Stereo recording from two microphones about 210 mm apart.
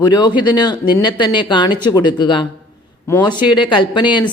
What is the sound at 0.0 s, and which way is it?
A man's voice, 20° left (ahead or behind).